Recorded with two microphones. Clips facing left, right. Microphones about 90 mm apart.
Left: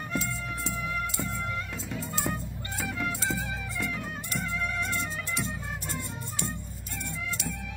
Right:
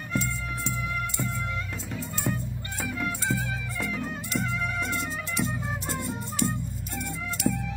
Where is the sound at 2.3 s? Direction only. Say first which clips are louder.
Right 2 dB; 5° left (ahead or behind).